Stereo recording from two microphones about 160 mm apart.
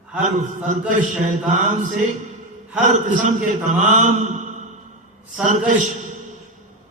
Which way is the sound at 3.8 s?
50° right (ahead or behind).